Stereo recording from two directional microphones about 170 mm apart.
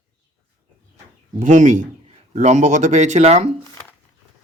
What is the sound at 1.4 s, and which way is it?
Speech, 45° right (ahead or behind).